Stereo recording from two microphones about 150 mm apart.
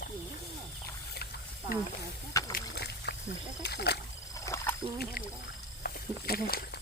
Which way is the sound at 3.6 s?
90° left.